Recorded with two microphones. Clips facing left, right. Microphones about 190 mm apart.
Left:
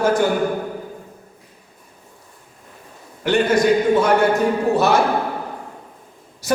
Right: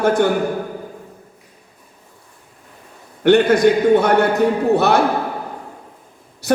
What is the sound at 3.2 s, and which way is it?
Speech, 60° right (ahead or behind).